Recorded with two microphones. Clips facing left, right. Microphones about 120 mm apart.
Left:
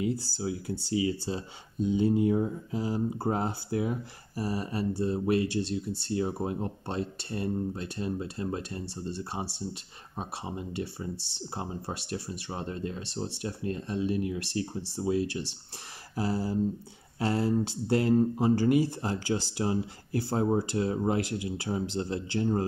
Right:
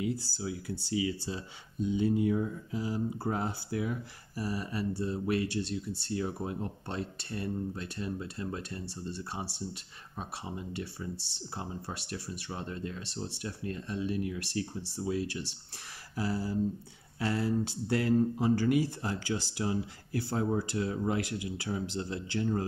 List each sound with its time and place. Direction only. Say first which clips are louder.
0.0 s speech: left 3 dB; 30° left (ahead or behind)